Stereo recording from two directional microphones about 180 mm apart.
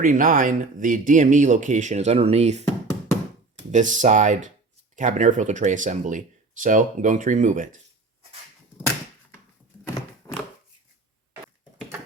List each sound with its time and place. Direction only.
0.0 s speech: 50° right (ahead or behind)
3.7 s speech: 45° right (ahead or behind)
10.3 s a sound: 15° left (ahead or behind)